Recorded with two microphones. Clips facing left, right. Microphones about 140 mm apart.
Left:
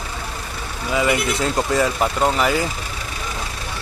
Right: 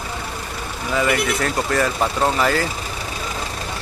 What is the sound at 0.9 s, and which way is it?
Speech, 15° left (ahead or behind).